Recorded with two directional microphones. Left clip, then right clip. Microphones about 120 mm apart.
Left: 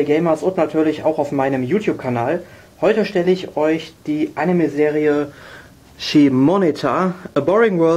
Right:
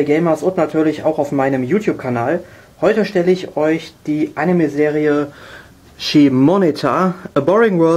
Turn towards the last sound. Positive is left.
turn(degrees=-25)  # may be behind; listen again after turning